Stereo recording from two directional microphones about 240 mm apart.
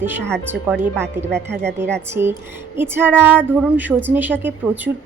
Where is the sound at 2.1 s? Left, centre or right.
Centre.